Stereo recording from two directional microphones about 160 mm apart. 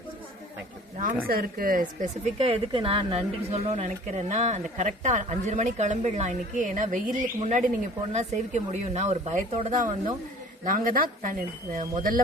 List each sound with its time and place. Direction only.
1.3 s speech: 65° right (ahead or behind)
2.4 s speech: 35° right (ahead or behind); by 12.2 s 60° right (ahead or behind)